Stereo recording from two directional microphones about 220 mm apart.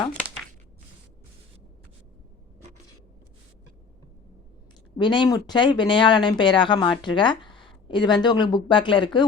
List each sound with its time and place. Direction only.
4.9 s speech: 20° left (ahead or behind)